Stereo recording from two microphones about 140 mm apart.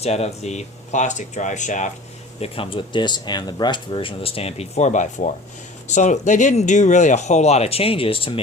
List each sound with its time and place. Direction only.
0.0 s speech: 50° left (ahead or behind)
2.4 s speech: 40° left (ahead or behind)